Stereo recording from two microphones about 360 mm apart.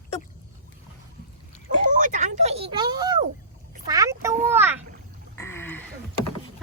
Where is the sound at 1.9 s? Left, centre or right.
Right.